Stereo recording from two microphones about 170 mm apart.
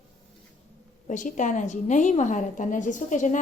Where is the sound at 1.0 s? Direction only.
45° left (ahead or behind).